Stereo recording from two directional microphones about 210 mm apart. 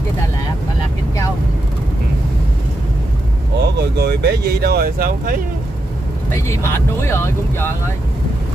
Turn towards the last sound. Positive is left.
turn(degrees=10)  # may be behind; listen again after turning